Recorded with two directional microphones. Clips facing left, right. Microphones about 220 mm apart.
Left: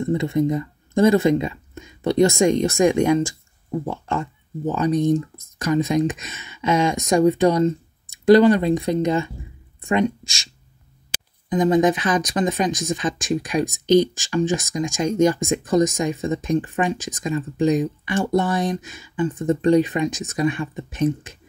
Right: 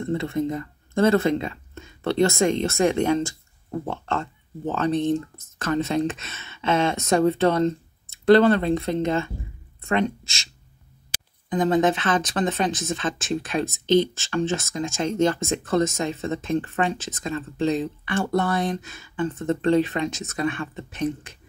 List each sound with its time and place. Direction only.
0.0 s speech: 15° left (ahead or behind)
11.4 s speech: 15° left (ahead or behind)